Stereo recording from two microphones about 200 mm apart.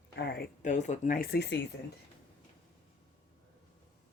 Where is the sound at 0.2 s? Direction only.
50° left (ahead or behind).